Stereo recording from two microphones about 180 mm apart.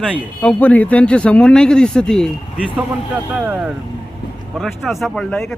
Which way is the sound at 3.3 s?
10° right (ahead or behind).